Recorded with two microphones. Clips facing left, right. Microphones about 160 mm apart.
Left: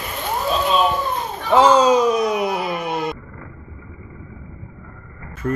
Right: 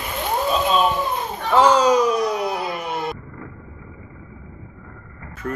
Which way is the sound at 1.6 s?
20° left (ahead or behind).